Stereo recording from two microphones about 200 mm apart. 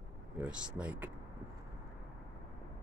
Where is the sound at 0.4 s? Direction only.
5° right (ahead or behind).